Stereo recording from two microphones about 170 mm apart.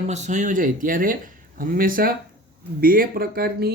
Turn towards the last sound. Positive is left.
turn(degrees=-65)  # may be behind; listen again after turning